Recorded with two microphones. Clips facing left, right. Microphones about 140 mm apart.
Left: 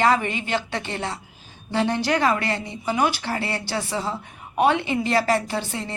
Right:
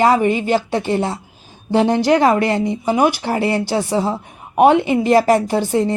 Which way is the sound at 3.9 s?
50° right (ahead or behind).